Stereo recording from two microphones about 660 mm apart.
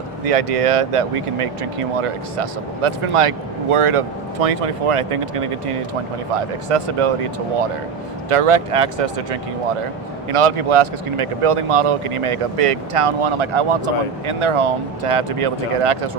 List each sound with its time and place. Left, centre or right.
0.3 s speech: right
8.3 s speech: right